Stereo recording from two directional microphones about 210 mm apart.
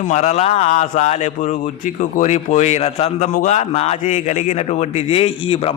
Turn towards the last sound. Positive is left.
turn(degrees=25)  # may be behind; listen again after turning